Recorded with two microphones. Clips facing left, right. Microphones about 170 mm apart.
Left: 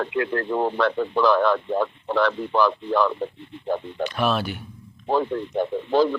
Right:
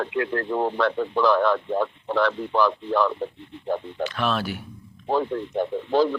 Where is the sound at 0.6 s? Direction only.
90° left.